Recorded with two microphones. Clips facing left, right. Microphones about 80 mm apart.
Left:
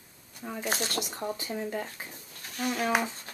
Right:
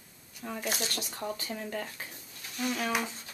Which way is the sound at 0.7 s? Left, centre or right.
Left.